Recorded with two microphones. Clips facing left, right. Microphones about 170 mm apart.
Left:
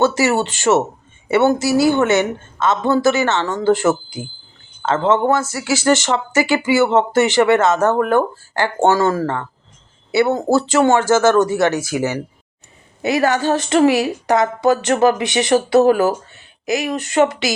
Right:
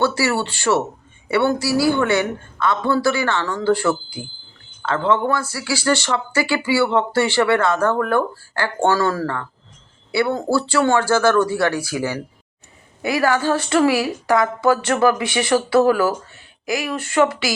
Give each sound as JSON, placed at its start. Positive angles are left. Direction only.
{"t": 0.0, "sound": "a woman's voice", "side_deg": 20}